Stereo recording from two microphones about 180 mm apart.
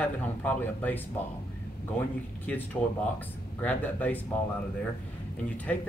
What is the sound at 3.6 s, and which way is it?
Speech, 10° left (ahead or behind).